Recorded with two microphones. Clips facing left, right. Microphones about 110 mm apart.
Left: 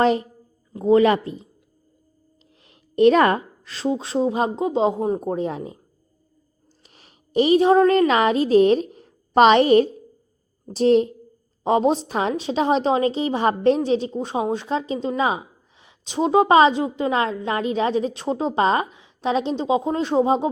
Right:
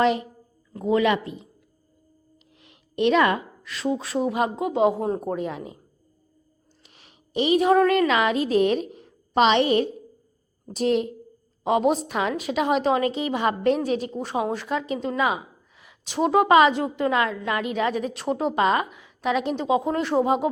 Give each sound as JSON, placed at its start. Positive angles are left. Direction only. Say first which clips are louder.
{"t": 0.0, "sound": "a woman's voice", "louder": "left 2 dB", "side_deg": 35}
{"t": 2.6, "sound": "a woman's voice", "louder": "left 7 dB", "side_deg": 35}
{"t": 5.3, "sound": "a woman's voice", "louder": "left 3 dB", "side_deg": 35}